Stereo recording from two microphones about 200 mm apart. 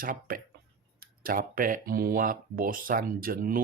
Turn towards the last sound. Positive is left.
turn(degrees=-45)  # may be behind; listen again after turning